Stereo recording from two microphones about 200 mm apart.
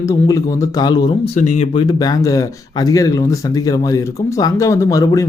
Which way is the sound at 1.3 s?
35° left (ahead or behind).